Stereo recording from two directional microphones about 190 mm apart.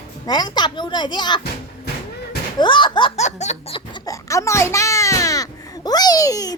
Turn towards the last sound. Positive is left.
turn(degrees=20)  # may be behind; listen again after turning